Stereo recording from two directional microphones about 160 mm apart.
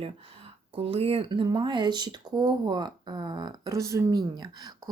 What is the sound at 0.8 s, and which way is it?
Speech, 35° right (ahead or behind).